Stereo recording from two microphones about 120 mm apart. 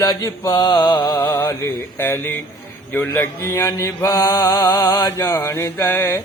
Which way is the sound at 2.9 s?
15° left (ahead or behind).